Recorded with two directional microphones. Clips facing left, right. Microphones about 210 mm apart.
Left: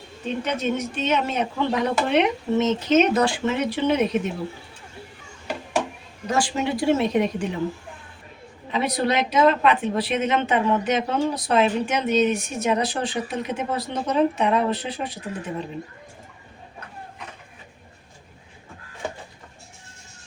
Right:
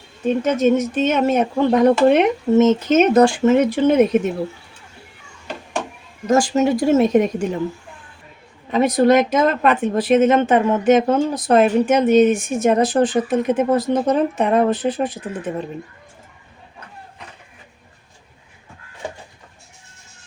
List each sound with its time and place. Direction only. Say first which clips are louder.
0.3 s speech: right 9 dB; 45° right (ahead or behind)
6.2 s speech: right 8 dB; 45° right (ahead or behind)
8.7 s speech: right 9 dB; 45° right (ahead or behind)